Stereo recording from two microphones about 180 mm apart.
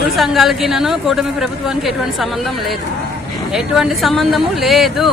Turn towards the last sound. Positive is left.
turn(degrees=0)  # may be behind; listen again after turning